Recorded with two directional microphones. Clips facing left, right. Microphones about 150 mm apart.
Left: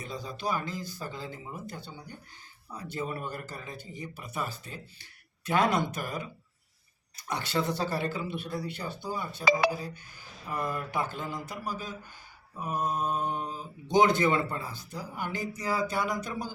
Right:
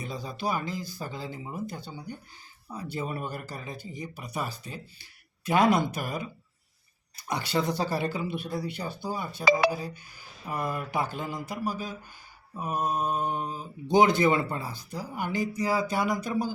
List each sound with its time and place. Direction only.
0.0 s speech: 10° right (ahead or behind)
9.4 s speech: 75° right (ahead or behind)
9.7 s speech: 15° right (ahead or behind)